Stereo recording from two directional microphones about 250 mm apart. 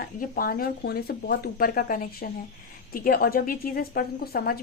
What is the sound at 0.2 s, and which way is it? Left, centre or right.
A woman's voice, left.